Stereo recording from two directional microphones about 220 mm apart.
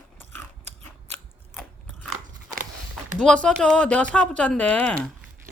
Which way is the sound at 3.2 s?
5° left (ahead or behind).